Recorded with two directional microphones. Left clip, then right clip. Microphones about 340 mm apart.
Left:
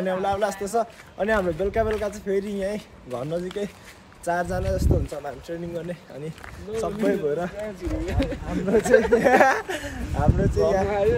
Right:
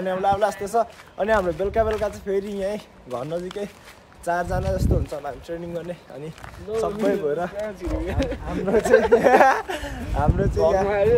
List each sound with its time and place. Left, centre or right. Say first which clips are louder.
0.0 s speech: right 3 dB; centre
8.6 s speech: right 1 dB; centre